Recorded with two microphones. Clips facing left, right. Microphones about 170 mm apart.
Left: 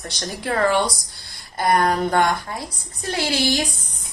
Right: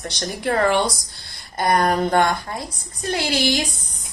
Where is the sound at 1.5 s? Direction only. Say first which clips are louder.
Even; 20° right (ahead or behind).